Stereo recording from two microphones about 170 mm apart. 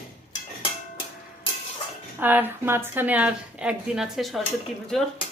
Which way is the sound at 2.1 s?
10° right (ahead or behind).